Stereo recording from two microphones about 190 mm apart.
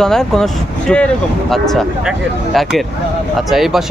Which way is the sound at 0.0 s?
5° left (ahead or behind).